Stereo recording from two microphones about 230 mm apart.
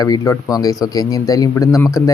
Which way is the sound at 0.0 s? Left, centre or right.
Centre.